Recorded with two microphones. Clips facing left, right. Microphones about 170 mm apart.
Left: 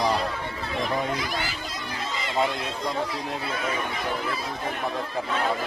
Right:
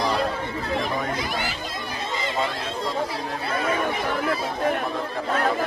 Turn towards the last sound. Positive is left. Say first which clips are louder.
# right 7 dB
turn(degrees=-55)  # may be behind; listen again after turning